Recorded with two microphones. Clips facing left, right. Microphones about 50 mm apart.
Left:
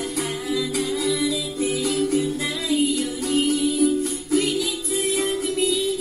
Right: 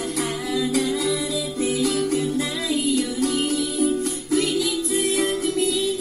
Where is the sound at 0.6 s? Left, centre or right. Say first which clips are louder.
Right 4 dB; right.